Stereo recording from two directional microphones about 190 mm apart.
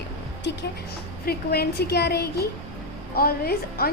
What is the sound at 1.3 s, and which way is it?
A woman's voice, 55° left (ahead or behind).